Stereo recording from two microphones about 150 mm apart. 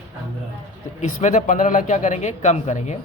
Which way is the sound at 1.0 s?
55° left (ahead or behind).